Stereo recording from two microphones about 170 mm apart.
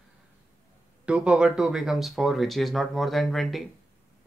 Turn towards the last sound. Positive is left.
turn(degrees=0)  # may be behind; listen again after turning